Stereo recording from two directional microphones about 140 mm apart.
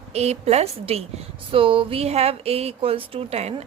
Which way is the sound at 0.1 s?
50° right (ahead or behind).